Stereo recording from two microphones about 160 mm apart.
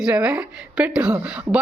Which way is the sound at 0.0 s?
5° right (ahead or behind).